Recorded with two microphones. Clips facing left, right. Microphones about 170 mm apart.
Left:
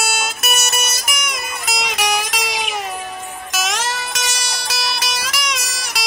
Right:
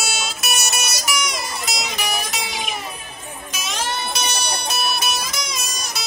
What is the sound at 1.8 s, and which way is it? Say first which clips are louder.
Music: left 8 dB; 90° left.